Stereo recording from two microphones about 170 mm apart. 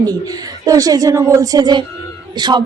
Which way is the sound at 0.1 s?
20° right (ahead or behind).